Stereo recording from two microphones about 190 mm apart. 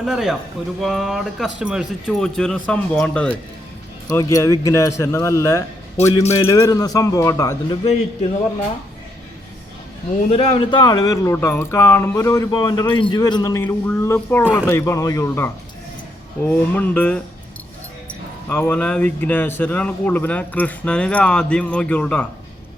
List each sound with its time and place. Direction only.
0.0 s speech: 5° right (ahead or behind)
4.0 s speech: 20° left (ahead or behind)
10.2 s speech: 35° left (ahead or behind); by 17.2 s 10° left (ahead or behind)
18.4 s speech: 10° left (ahead or behind)